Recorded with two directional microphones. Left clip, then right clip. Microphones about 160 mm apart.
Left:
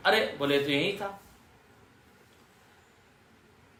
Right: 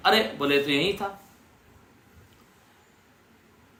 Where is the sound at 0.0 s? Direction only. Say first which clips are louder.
Right 3 dB; 20° right (ahead or behind).